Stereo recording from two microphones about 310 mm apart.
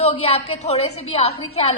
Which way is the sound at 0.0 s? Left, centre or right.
Centre.